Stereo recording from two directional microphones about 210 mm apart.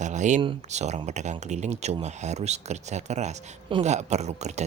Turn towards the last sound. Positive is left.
turn(degrees=-30)  # may be behind; listen again after turning